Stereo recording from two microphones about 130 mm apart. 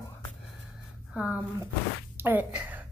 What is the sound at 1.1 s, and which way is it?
A woman's voice, 10° right (ahead or behind).